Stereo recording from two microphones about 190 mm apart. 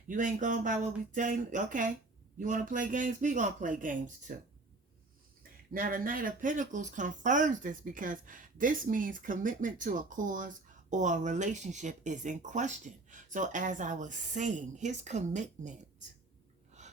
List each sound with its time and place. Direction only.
0.1 s speech: 45° right (ahead or behind)
5.4 s speech: 45° right (ahead or behind)